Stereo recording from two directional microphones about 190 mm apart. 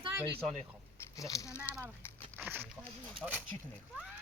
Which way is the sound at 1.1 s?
15° left (ahead or behind).